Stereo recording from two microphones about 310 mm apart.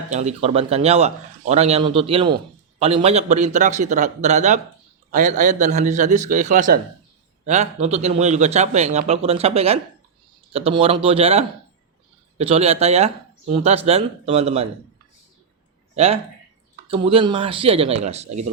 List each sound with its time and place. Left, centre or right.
0.1 s speech: right
16.9 s speech: centre